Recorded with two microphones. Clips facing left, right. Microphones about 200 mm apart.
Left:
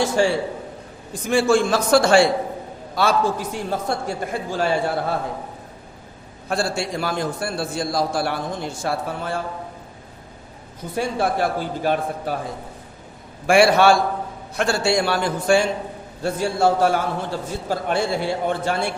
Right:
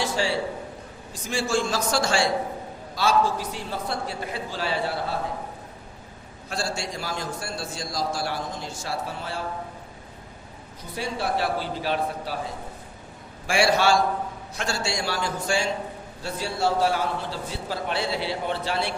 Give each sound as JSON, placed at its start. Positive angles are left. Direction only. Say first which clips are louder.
{"t": 0.0, "sound": "a man's voice", "louder": "left 6 dB", "side_deg": 50}
{"t": 6.5, "sound": "a man's voice", "louder": "left 7 dB", "side_deg": 55}
{"t": 10.9, "sound": "a man's voice", "louder": "left 5 dB", "side_deg": 50}
{"t": 13.5, "sound": "a man's voice", "louder": "left 6 dB", "side_deg": 55}